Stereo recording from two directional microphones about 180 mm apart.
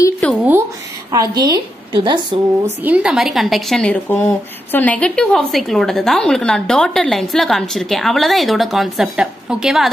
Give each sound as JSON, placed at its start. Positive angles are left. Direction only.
{"t": 0.4, "sound": "a woman's voice", "side_deg": -10}
{"t": 2.6, "sound": "speech", "side_deg": -10}